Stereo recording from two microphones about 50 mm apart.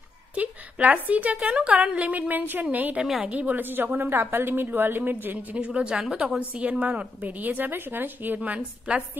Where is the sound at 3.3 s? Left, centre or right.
Right.